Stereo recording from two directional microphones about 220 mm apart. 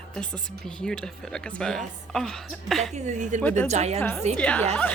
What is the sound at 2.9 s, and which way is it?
A woman's voice, 30° right (ahead or behind).